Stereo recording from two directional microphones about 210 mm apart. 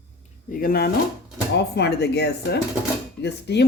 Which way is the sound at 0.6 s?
45° left (ahead or behind).